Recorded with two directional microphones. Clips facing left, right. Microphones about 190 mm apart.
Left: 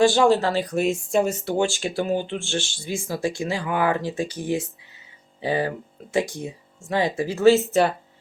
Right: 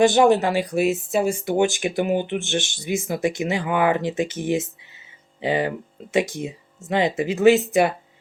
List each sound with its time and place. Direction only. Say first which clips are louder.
0.0 s speech: right 2 dB; 20° right (ahead or behind)